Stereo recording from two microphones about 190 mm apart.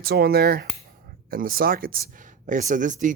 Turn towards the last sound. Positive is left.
turn(degrees=-40)  # may be behind; listen again after turning